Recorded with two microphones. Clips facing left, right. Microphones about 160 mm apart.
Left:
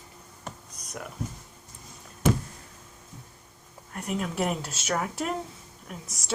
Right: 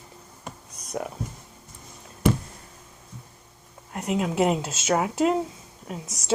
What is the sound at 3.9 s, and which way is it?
Speech, 70° right (ahead or behind).